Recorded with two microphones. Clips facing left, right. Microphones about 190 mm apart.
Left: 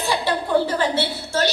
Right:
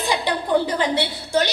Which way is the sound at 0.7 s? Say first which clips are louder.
Even; 15° right (ahead or behind).